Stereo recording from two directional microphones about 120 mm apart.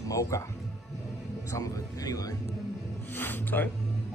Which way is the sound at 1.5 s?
30° left (ahead or behind).